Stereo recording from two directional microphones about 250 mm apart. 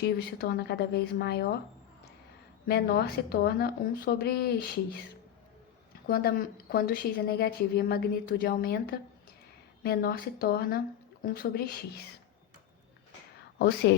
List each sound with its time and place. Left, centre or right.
0.0 s a woman's voice: left
2.6 s a woman's voice: left
6.1 s a woman's voice: left
13.6 s a woman's voice: left